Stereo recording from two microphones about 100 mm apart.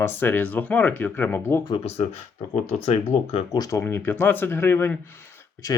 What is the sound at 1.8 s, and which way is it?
Speech, 90° left.